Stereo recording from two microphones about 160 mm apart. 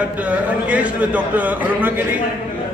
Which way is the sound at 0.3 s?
10° right (ahead or behind).